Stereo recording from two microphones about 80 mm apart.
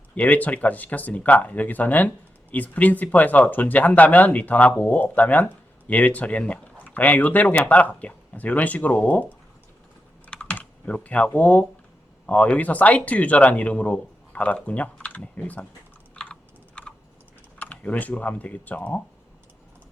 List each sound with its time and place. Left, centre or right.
0.2 s speech: centre
10.2 s typing: centre
11.3 s speech: centre
16.3 s computer keyboard: centre
17.6 s speech: centre